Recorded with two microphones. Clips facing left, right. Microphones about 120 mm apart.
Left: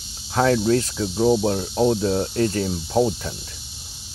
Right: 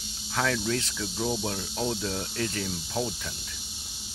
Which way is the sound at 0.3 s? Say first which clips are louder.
Left 10 dB; 35° left (ahead or behind).